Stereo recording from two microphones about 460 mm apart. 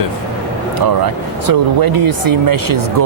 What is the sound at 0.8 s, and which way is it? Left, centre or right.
Speech, right.